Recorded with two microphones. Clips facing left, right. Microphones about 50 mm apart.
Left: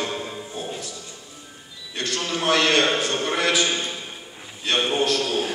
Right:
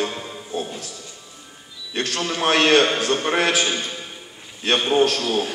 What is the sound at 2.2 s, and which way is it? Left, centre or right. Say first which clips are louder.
Speech: right 2 dB; right.